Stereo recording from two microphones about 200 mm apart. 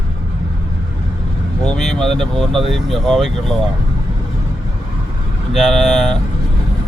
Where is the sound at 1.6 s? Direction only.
Centre (ahead or behind).